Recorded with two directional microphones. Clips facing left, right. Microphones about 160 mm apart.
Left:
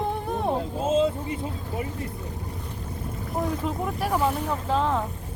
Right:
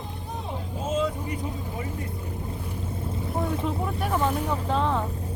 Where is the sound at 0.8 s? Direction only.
25° left (ahead or behind).